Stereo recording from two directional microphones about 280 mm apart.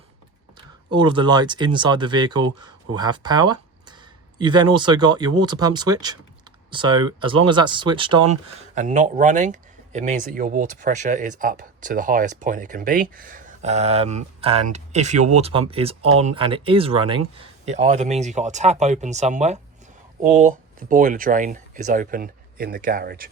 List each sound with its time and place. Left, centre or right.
0.9 s speech: centre